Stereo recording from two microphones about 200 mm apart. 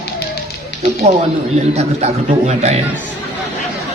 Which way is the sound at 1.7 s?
30° right (ahead or behind).